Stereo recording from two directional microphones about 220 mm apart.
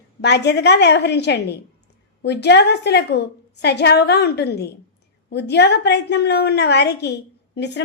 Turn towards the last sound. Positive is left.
turn(degrees=50)  # may be behind; listen again after turning